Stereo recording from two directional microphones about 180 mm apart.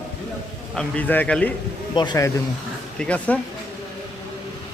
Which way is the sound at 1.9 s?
20° left (ahead or behind).